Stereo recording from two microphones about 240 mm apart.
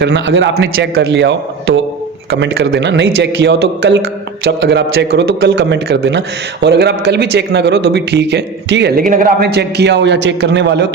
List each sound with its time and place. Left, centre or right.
0.0 s a man's voice: right